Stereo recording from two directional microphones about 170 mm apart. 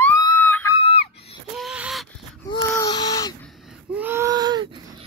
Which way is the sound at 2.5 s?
25° left (ahead or behind).